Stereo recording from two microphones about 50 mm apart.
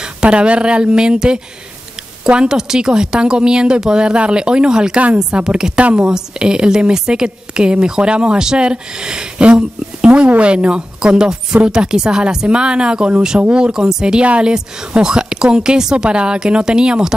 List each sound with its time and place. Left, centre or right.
0.0 s a woman's voice: centre
14.2 s speech: right
14.5 s a woman's voice: centre